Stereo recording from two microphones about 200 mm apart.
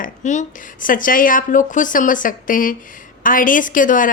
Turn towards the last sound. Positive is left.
turn(degrees=40)  # may be behind; listen again after turning